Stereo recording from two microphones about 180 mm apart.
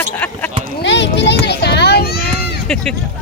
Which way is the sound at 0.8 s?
75° left (ahead or behind).